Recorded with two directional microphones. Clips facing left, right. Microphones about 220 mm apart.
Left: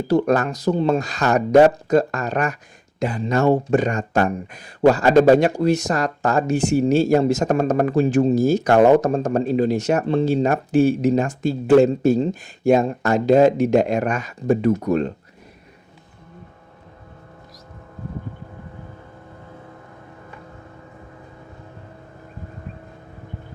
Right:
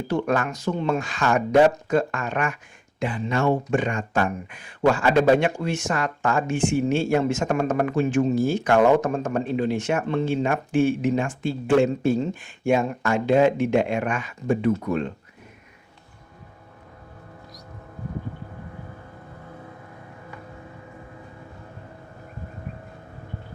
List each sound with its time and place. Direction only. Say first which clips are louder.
0.1 s speech: left 6 dB; 40° left (ahead or behind)